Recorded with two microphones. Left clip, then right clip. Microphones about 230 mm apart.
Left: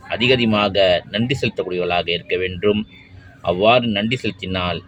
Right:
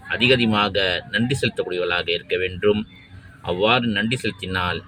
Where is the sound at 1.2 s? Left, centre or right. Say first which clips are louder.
Left 2 dB; centre.